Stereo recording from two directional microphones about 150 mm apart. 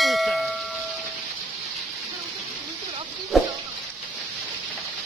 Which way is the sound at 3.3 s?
Centre (ahead or behind).